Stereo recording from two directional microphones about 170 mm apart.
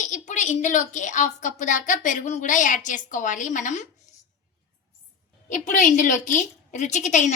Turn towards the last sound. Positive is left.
turn(degrees=45)  # may be behind; listen again after turning